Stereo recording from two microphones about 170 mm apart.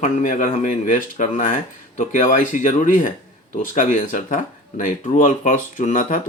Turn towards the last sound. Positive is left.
turn(degrees=50)  # may be behind; listen again after turning